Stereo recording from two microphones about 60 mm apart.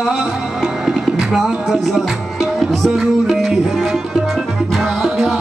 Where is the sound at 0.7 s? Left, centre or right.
Centre.